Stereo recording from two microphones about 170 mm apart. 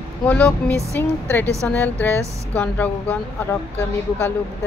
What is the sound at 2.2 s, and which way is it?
Speech, 15° right (ahead or behind).